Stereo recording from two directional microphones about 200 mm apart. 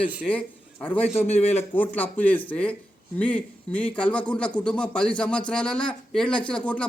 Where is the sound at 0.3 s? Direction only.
5° left (ahead or behind).